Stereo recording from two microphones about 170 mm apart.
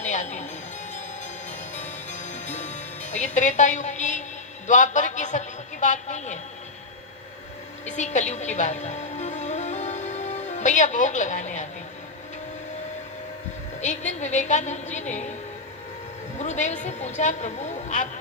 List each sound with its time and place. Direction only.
0.0 s music: 45° left (ahead or behind)
1.5 s music: 45° left (ahead or behind)
4.6 s a woman's voice: 45° left (ahead or behind)
7.9 s a woman's voice: 45° left (ahead or behind)
8.3 s music: 45° left (ahead or behind)
13.8 s a woman's voice: 45° left (ahead or behind)
16.4 s a woman's voice: 45° left (ahead or behind)